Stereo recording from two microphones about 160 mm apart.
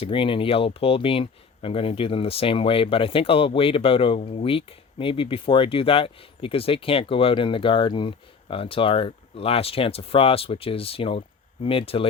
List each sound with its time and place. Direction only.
0.0 s speech: 35° left (ahead or behind)